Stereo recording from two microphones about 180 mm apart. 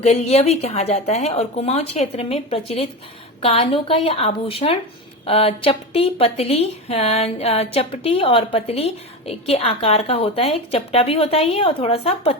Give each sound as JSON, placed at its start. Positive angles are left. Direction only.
{"t": 0.0, "sound": "a woman's voice", "side_deg": 35}